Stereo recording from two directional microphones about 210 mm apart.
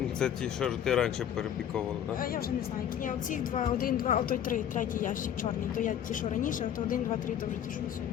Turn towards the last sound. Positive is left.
turn(degrees=40)  # may be behind; listen again after turning